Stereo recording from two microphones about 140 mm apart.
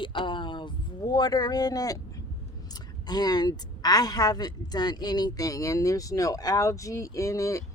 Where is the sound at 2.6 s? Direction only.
30° left (ahead or behind).